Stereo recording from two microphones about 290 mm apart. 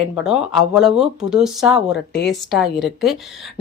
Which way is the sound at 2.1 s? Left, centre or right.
Left.